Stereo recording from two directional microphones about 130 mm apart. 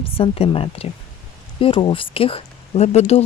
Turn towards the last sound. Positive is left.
turn(degrees=55)  # may be behind; listen again after turning